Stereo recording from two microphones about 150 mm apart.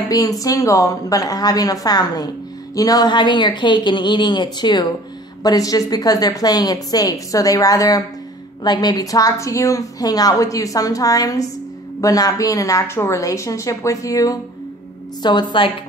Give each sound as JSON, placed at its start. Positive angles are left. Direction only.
{"t": 0.1, "sound": "speech", "side_deg": 25}